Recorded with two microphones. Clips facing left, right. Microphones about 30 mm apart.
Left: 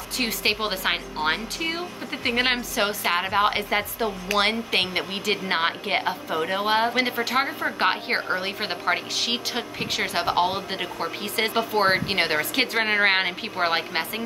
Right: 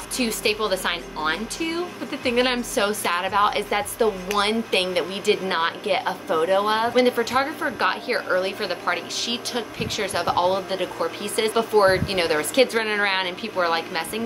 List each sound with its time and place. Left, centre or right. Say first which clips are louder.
0.2 s speech: right 2 dB; centre